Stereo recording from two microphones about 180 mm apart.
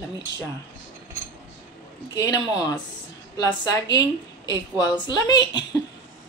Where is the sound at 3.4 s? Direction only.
20° left (ahead or behind).